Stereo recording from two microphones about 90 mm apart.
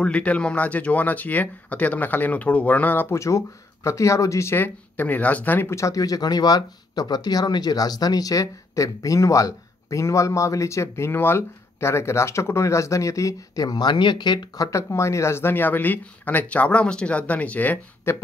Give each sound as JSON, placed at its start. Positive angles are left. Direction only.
{"t": 0.0, "sound": "speech", "side_deg": 15}
{"t": 18.1, "sound": "speech", "side_deg": 25}